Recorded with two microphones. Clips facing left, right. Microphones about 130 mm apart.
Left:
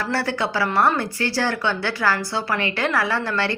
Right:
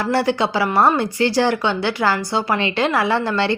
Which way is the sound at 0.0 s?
20° right (ahead or behind).